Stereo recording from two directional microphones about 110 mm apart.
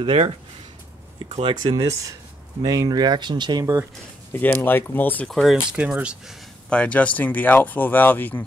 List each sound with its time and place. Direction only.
0.0 s speech: 55° right (ahead or behind)
1.5 s speech: 40° right (ahead or behind)
4.3 s speech: 20° left (ahead or behind)
5.3 s speech: centre (ahead or behind)
5.8 s speech: 10° right (ahead or behind)
6.7 s speech: 10° left (ahead or behind)